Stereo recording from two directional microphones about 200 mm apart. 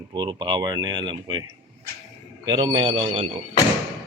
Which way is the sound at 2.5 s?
20° right (ahead or behind).